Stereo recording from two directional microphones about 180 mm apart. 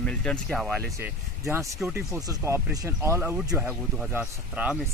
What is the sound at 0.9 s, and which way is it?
Speech, 15° right (ahead or behind).